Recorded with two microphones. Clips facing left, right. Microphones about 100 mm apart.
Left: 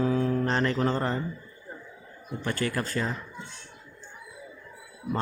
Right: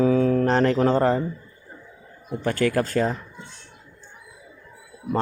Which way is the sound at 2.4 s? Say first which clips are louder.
Right 8 dB; 50° right (ahead or behind).